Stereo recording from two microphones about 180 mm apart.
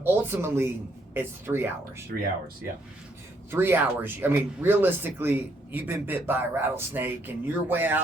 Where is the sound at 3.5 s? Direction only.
10° right (ahead or behind).